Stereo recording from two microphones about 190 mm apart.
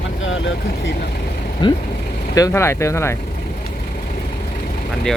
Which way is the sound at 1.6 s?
25° left (ahead or behind).